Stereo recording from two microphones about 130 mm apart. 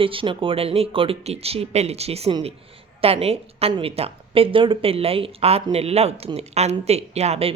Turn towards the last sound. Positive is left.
turn(degrees=-50)  # may be behind; listen again after turning